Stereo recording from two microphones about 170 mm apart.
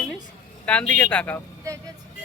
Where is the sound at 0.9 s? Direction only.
5° left (ahead or behind).